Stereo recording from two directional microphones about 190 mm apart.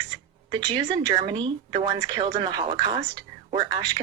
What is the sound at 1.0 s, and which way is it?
Speech, 25° right (ahead or behind).